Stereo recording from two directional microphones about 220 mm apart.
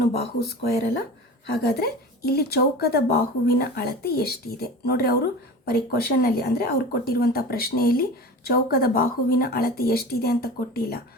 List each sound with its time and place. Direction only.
0.1 s a woman's voice: 45° left (ahead or behind)